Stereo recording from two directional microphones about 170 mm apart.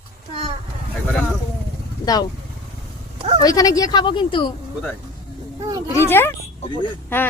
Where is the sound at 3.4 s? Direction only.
20° left (ahead or behind).